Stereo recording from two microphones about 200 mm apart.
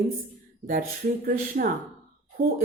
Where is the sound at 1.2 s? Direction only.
45° right (ahead or behind).